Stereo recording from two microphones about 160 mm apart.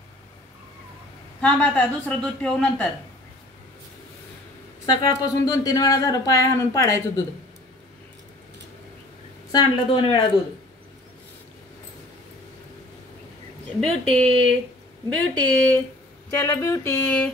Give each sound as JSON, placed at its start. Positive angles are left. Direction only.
{"t": 1.4, "sound": "a woman's voice", "side_deg": 5}
{"t": 5.0, "sound": "speech", "side_deg": 20}
{"t": 9.5, "sound": "speech", "side_deg": 25}
{"t": 13.7, "sound": "speech", "side_deg": 0}
{"t": 14.2, "sound": "speech", "side_deg": -35}
{"t": 15.0, "sound": "a woman's voice", "side_deg": 10}